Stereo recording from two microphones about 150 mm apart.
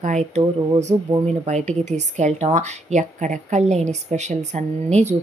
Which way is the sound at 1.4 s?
50° right (ahead or behind).